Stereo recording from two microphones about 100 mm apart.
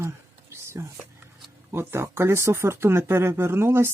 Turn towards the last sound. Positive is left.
turn(degrees=-25)  # may be behind; listen again after turning